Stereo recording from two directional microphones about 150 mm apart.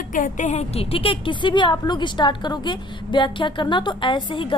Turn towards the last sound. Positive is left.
turn(degrees=35)  # may be behind; listen again after turning